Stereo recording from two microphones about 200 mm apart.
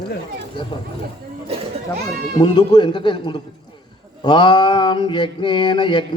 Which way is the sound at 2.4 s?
20° left (ahead or behind).